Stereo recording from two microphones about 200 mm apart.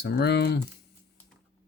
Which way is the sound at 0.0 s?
55° left (ahead or behind).